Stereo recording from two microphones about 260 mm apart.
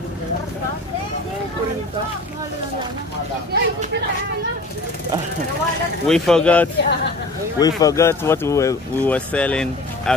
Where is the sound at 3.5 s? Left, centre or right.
Right.